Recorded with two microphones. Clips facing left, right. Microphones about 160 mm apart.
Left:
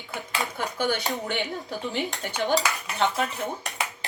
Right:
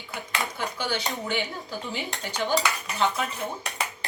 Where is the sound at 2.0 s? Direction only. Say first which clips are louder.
Left 3 dB; 20° left (ahead or behind).